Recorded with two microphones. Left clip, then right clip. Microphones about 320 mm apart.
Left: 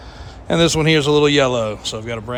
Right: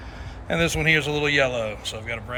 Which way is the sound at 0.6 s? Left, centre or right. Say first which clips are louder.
Left 5 dB; centre.